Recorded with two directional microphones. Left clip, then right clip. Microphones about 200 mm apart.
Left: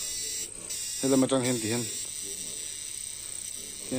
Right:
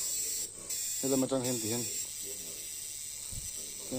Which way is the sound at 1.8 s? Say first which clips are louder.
Left 3 dB; 55° right (ahead or behind).